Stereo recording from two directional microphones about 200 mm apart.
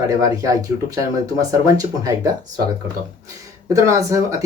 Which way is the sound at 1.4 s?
15° right (ahead or behind).